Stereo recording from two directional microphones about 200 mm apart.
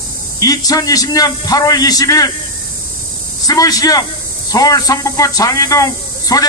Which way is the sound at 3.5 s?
20° left (ahead or behind).